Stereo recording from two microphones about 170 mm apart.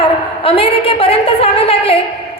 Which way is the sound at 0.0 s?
35° left (ahead or behind).